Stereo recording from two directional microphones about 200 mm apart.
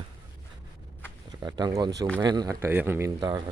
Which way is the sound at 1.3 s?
20° right (ahead or behind).